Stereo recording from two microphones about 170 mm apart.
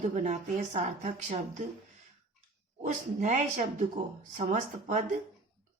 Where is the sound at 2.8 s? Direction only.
45° right (ahead or behind).